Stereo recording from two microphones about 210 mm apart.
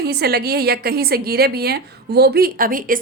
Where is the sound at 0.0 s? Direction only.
50° right (ahead or behind).